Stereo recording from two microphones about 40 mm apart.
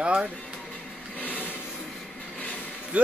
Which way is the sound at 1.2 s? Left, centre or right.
Left.